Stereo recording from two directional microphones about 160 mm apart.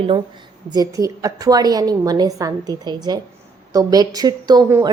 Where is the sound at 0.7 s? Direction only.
25° right (ahead or behind).